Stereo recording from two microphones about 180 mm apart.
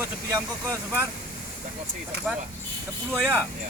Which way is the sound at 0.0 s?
15° right (ahead or behind).